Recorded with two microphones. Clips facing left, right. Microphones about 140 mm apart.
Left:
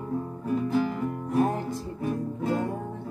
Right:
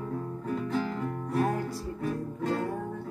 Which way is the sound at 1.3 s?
20° left (ahead or behind).